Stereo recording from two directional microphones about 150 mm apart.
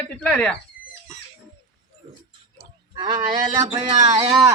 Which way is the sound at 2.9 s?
30° right (ahead or behind).